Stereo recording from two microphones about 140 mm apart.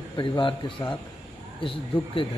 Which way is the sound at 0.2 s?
35° left (ahead or behind).